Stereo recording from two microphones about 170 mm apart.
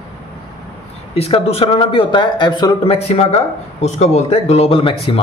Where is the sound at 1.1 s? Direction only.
35° left (ahead or behind).